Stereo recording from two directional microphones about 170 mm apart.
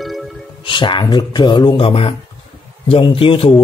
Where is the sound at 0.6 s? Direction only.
30° left (ahead or behind).